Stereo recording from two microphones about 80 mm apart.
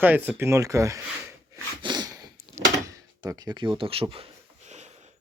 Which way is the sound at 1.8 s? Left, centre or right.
Right.